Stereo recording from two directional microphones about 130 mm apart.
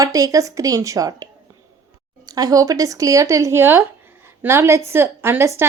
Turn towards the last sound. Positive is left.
turn(degrees=-20)  # may be behind; listen again after turning